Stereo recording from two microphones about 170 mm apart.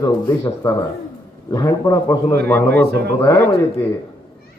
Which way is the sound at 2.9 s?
70° right (ahead or behind).